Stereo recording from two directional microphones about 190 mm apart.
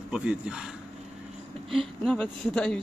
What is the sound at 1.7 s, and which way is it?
Speech, centre (ahead or behind).